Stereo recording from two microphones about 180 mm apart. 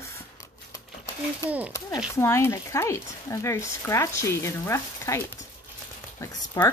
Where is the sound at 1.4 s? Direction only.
15° left (ahead or behind).